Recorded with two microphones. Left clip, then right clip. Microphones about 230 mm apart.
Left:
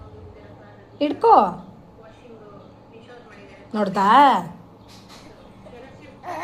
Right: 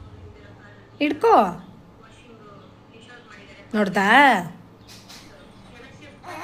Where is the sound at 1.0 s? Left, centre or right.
Right.